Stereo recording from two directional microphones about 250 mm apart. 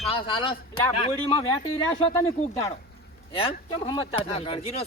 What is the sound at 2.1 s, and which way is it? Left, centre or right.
Speech, centre.